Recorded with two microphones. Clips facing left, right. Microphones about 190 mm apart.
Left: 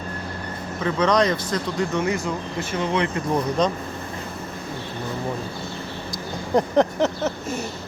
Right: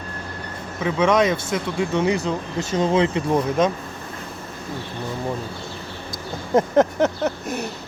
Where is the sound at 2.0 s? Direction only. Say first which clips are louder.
Right 3 dB; 20° right (ahead or behind).